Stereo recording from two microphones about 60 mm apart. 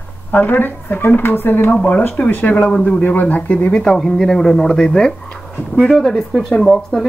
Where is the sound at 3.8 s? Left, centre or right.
Centre.